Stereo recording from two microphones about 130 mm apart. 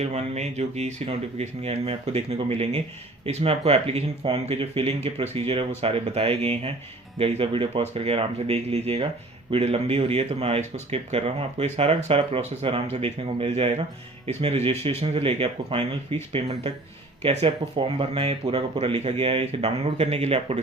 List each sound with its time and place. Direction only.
0.0 s speech: 55° right (ahead or behind)